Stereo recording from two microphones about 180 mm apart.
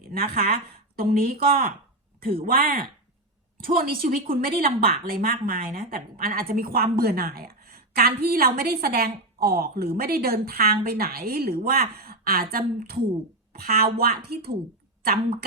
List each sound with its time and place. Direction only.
0.0 s speech: 55° right (ahead or behind)
4.0 s a woman's voice: 55° right (ahead or behind)